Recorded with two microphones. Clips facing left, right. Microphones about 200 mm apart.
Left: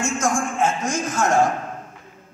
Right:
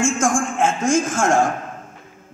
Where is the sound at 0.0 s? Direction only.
50° right (ahead or behind).